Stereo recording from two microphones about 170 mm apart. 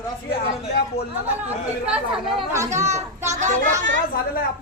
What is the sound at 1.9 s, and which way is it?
Speech, 5° right (ahead or behind).